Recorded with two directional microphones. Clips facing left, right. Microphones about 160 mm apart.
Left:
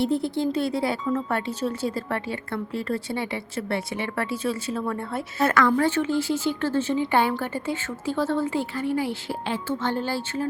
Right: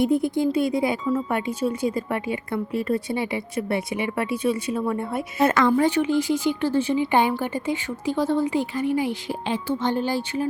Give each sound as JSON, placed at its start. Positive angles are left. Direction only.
{"t": 0.0, "sound": "speech", "side_deg": -10}